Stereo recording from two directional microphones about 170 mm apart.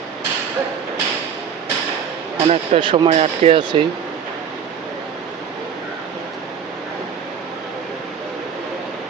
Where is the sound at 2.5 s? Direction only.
30° right (ahead or behind).